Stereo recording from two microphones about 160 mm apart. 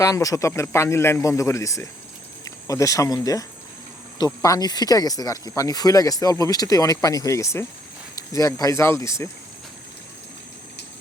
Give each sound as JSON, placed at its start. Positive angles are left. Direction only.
{"t": 0.0, "sound": "speech", "side_deg": 20}
{"t": 4.4, "sound": "speech", "side_deg": 25}